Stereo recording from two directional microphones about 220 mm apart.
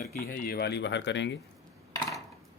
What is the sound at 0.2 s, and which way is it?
Speech, 40° left (ahead or behind).